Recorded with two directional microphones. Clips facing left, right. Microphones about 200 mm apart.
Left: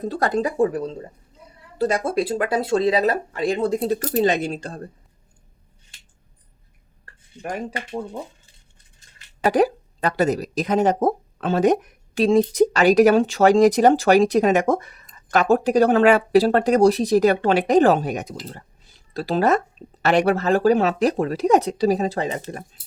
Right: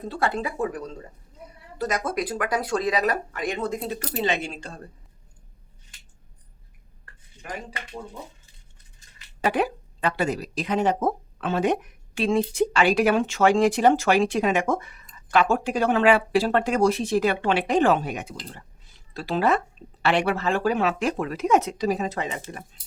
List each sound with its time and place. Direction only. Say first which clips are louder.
0.0 s speech: left 5 dB; 40° left (ahead or behind)
9.4 s speech: left 6 dB; 40° left (ahead or behind)